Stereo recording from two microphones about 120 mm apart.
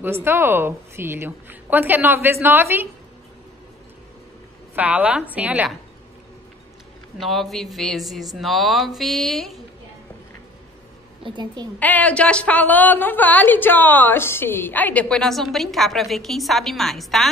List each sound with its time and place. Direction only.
0.0 s a woman's voice: 20° right (ahead or behind)
4.7 s a woman's voice: 15° right (ahead or behind)
7.2 s speech: centre (ahead or behind)
11.2 s a woman's voice: 40° right (ahead or behind)
11.8 s a woman's voice: 15° left (ahead or behind)